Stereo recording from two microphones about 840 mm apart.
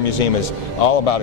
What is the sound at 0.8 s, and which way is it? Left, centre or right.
Speech, left.